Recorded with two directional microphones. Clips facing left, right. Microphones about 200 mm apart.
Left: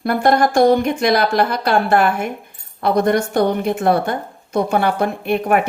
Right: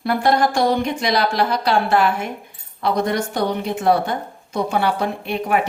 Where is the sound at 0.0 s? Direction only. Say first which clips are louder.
Left 2 dB; 50° left (ahead or behind).